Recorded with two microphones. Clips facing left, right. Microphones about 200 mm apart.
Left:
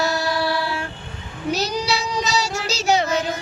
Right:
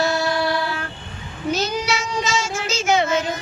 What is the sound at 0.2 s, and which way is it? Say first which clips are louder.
Female singing: right 1 dB; centre (ahead or behind).